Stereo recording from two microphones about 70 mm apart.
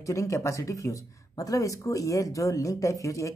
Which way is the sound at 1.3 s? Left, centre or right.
Left.